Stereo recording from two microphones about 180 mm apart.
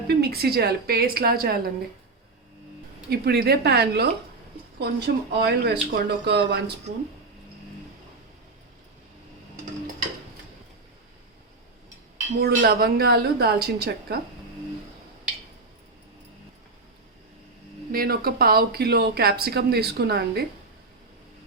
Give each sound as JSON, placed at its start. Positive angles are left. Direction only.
{"t": 0.1, "sound": "speech", "side_deg": -65}
{"t": 3.1, "sound": "speech", "side_deg": -60}
{"t": 12.4, "sound": "speech", "side_deg": -60}
{"t": 17.9, "sound": "speech", "side_deg": -55}